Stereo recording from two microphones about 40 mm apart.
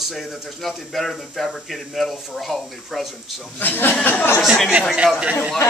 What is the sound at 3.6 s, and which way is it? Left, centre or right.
Speech, left.